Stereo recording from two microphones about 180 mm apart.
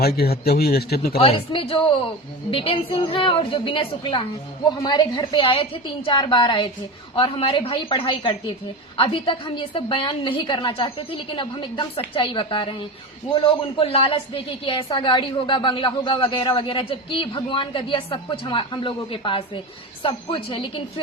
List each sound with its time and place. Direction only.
0.0 s a man's voice: 60° left (ahead or behind)
1.2 s a woman's voice: 30° left (ahead or behind)